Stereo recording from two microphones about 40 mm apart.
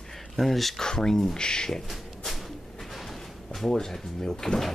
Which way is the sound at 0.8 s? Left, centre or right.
Centre.